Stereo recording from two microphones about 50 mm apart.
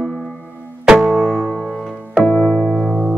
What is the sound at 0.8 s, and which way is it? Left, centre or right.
Music, centre.